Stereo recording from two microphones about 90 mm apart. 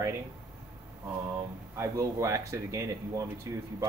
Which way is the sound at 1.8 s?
35° right (ahead or behind).